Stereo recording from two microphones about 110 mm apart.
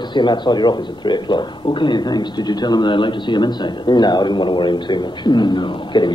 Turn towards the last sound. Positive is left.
turn(degrees=45)  # may be behind; listen again after turning